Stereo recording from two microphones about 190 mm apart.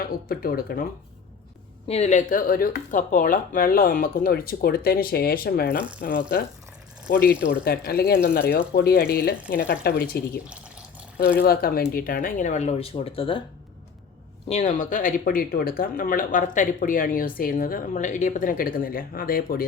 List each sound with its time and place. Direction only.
0.0 s speech: 50° left (ahead or behind)
1.9 s speech: 35° left (ahead or behind)
14.4 s speech: 35° left (ahead or behind)